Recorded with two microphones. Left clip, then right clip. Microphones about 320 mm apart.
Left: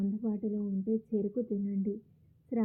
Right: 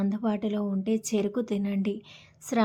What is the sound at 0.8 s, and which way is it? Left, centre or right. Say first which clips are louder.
Speech: right 4 dB; right.